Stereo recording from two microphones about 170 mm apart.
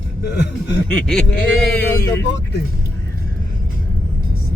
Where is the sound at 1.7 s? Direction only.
15° left (ahead or behind).